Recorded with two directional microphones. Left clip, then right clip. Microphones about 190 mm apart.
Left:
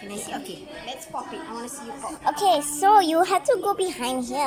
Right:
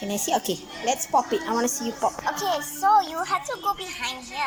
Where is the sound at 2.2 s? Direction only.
20° left (ahead or behind).